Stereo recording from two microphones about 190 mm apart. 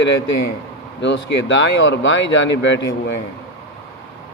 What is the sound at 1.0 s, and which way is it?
Speech, 75° left (ahead or behind).